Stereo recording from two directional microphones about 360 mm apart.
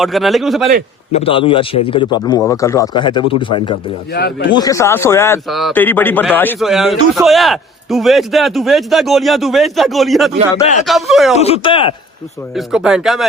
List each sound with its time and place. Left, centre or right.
0.0 s a man's voice: centre
1.1 s speech: centre
4.1 s speech: left
4.5 s a man's voice: centre
11.3 s speech: centre
12.5 s a man's voice: centre